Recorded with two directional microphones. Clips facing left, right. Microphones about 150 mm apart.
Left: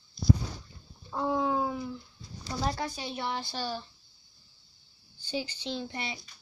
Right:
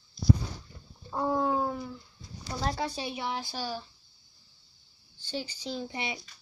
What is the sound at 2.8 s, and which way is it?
Speech, 30° right (ahead or behind).